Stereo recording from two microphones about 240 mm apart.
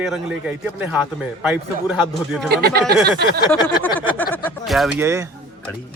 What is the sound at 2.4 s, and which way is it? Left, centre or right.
Speech, right.